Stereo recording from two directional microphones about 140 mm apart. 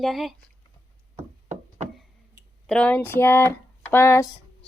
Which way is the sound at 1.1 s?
55° right (ahead or behind).